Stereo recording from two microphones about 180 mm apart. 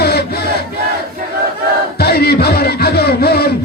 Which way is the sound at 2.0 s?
60° left (ahead or behind).